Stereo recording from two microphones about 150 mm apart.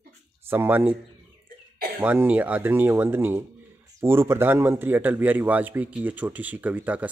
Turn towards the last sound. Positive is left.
turn(degrees=-10)  # may be behind; listen again after turning